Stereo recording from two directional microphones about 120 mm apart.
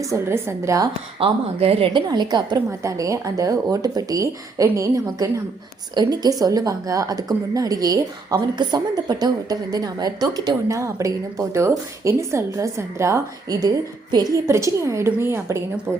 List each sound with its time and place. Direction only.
0.1 s a woman's voice: 20° right (ahead or behind)
1.2 s a woman's voice: 55° right (ahead or behind)
2.0 s a woman's voice: 35° right (ahead or behind)